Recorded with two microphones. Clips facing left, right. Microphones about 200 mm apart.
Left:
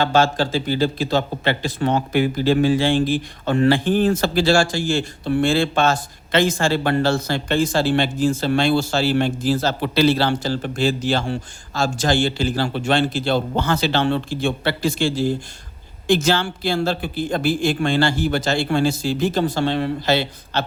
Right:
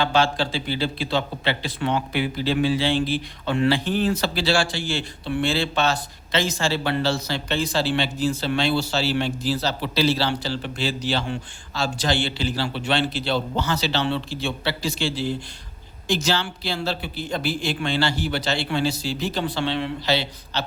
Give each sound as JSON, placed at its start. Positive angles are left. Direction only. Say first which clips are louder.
{"t": 0.0, "sound": "a man's voice", "louder": "left 3 dB", "side_deg": 45}